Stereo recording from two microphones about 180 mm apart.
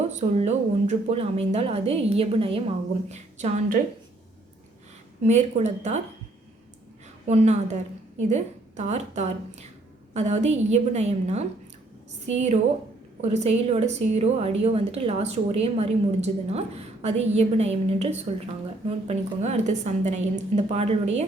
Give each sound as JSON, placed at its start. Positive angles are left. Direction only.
{"t": 0.2, "sound": "a woman's voice", "side_deg": -40}
{"t": 5.2, "sound": "a woman's voice", "side_deg": -40}
{"t": 7.3, "sound": "a woman's voice", "side_deg": -40}
{"t": 13.2, "sound": "a woman's voice", "side_deg": -35}